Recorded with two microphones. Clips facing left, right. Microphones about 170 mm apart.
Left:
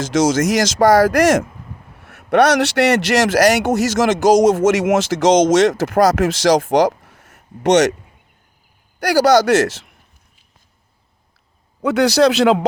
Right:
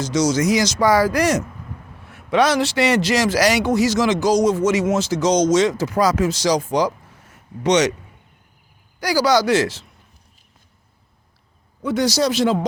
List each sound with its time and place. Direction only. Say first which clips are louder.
0.1 s speech: left 3 dB; 90° left
0.8 s speech: left 6 dB; 45° left (ahead or behind)
1.0 s speech: left 5 dB; 85° left
2.0 s a man's voice: left 4 dB; 65° left (ahead or behind)
3.8 s speech: left 4 dB; 75° left (ahead or behind)
7.3 s speech: left 3 dB; 50° left (ahead or behind)
9.0 s a man's voice: left 4 dB; 65° left (ahead or behind)
11.8 s a man's voice: left 6 dB; 65° left (ahead or behind)